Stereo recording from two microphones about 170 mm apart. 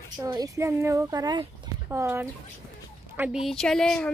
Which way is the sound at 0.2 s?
20° right (ahead or behind).